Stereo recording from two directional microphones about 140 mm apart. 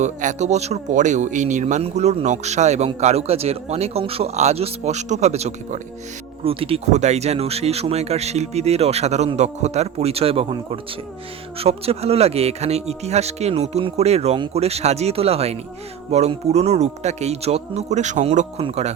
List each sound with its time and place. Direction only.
0.0 s speech: 60° right (ahead or behind)
6.4 s speech: 40° right (ahead or behind)
11.6 s speech: 45° right (ahead or behind)